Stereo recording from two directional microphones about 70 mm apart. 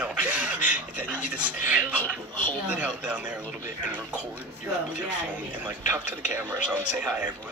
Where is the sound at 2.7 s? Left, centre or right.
Centre.